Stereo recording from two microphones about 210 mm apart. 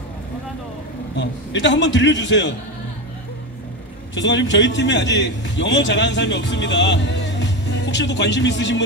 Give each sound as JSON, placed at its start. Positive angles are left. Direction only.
{"t": 1.1, "sound": "a man's voice", "side_deg": 55}
{"t": 4.1, "sound": "a man's voice", "side_deg": 60}